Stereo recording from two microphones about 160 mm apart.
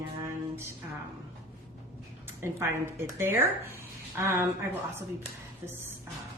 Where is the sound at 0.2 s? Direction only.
15° right (ahead or behind).